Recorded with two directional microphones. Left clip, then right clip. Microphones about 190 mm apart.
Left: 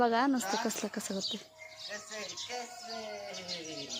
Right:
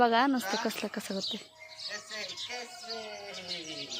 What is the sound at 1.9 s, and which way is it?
Music, 40° left (ahead or behind).